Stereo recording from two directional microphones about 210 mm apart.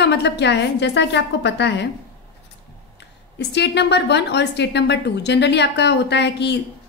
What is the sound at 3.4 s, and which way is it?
A woman's voice, 55° left (ahead or behind).